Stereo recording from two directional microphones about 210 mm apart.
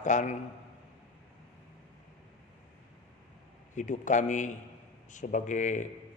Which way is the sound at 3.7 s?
35° left (ahead or behind).